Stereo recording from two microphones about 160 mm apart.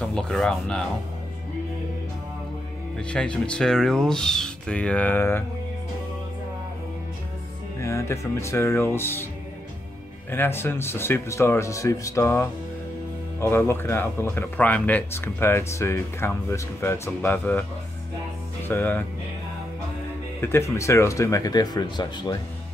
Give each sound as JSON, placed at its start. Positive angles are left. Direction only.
{"t": 0.0, "sound": "speech", "side_deg": 5}
{"t": 3.0, "sound": "speech", "side_deg": 5}
{"t": 7.8, "sound": "speech", "side_deg": 20}
{"t": 10.3, "sound": "speech", "side_deg": 15}
{"t": 18.7, "sound": "speech", "side_deg": 10}
{"t": 20.3, "sound": "speech", "side_deg": 15}